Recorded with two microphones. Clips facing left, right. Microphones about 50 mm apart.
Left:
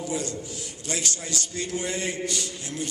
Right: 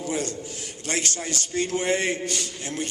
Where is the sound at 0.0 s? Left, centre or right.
Right.